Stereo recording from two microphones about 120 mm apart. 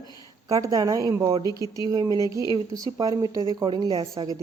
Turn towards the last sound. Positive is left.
turn(degrees=-35)  # may be behind; listen again after turning